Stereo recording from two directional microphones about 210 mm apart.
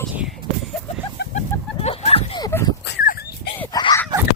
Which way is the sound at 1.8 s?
30° left (ahead or behind).